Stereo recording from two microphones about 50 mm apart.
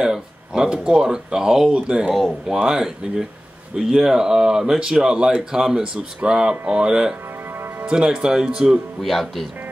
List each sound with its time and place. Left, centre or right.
0.0 s speech: centre
2.1 s speech: centre
9.0 s speech: centre